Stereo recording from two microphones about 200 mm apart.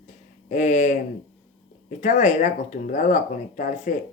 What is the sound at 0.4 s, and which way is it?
Speech, 35° left (ahead or behind).